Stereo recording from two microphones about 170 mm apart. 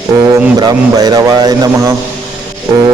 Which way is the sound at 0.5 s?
25° right (ahead or behind).